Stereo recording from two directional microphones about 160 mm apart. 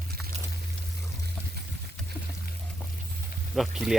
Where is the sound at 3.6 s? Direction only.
Centre (ahead or behind).